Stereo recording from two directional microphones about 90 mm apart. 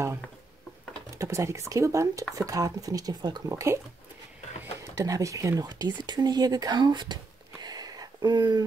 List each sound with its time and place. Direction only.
1.1 s speech: 35° right (ahead or behind)
3.2 s speech: 55° right (ahead or behind)
3.4 s speech: 35° right (ahead or behind)
4.9 s speech: 35° right (ahead or behind); by 7.2 s 55° right (ahead or behind)
7.6 s a sound: 45° right (ahead or behind)